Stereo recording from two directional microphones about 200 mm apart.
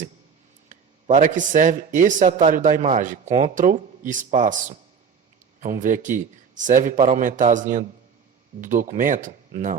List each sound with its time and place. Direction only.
0.7 s a man's voice: 40° right (ahead or behind)